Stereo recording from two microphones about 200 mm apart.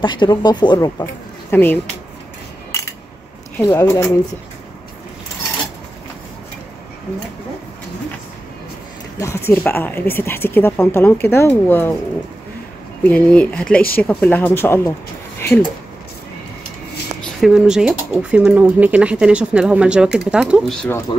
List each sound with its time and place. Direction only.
0.0 s speech: 25° left (ahead or behind)
2.7 s a sound: 15° left (ahead or behind)
3.5 s speech: 15° left (ahead or behind)
9.2 s speech: 15° left (ahead or behind)
13.0 s speech: 5° left (ahead or behind)
17.2 s speech: centre (ahead or behind)
21.1 s speech: 30° left (ahead or behind)